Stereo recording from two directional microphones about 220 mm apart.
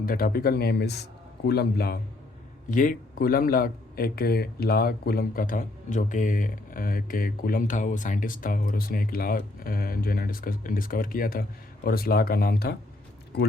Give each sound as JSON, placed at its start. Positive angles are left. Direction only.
{"t": 0.0, "sound": "speech", "side_deg": 40}